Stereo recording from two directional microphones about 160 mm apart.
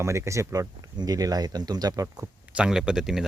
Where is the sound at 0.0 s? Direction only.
20° right (ahead or behind).